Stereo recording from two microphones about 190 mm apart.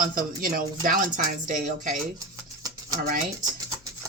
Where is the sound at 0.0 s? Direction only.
50° right (ahead or behind).